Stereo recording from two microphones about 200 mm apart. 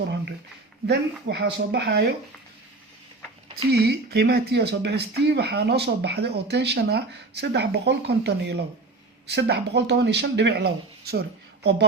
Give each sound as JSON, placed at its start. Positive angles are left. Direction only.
{"t": 0.9, "sound": "speech", "side_deg": -55}
{"t": 3.7, "sound": "speech", "side_deg": -55}